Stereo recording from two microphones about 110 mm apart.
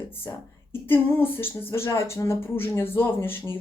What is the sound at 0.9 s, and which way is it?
Speech, 20° left (ahead or behind).